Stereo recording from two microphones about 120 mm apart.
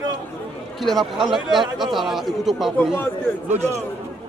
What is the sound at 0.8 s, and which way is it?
Speech, centre (ahead or behind).